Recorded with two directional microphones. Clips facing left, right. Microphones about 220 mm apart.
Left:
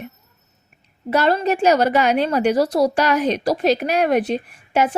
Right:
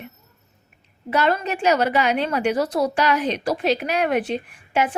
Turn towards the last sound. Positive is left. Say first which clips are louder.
# left 3 dB
turn(degrees=40)  # may be behind; listen again after turning